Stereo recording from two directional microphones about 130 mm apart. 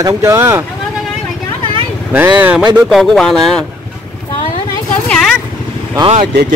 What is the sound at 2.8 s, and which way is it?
Speech, centre (ahead or behind).